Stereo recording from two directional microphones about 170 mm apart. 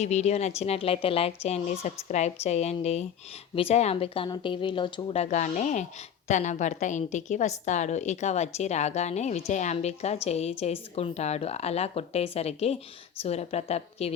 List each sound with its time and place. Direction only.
0.0 s a woman's voice: 40° left (ahead or behind)